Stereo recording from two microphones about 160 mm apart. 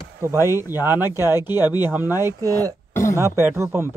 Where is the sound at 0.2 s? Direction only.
15° right (ahead or behind).